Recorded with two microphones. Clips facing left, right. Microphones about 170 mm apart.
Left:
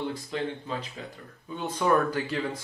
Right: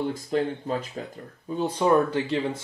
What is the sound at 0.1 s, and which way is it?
Speech, 45° right (ahead or behind).